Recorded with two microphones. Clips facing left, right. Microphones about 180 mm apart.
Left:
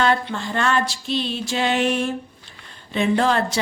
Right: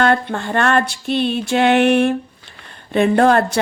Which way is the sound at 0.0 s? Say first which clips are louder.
Right 4 dB; 55° right (ahead or behind).